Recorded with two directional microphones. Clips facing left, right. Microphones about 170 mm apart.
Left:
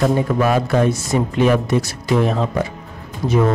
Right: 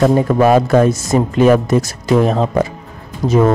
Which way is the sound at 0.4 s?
40° right (ahead or behind).